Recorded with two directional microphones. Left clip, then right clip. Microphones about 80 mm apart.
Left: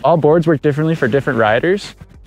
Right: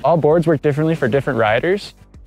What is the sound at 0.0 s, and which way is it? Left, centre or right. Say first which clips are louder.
Speech: left 2 dB; left.